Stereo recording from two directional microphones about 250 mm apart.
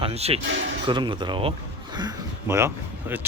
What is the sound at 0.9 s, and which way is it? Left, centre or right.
Speech, centre.